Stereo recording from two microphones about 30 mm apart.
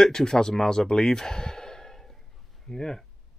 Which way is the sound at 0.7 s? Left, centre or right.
Left.